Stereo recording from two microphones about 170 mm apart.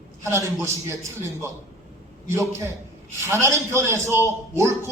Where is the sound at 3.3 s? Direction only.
15° right (ahead or behind).